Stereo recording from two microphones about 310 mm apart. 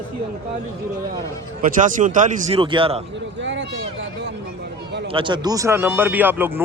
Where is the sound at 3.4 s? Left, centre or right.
Right.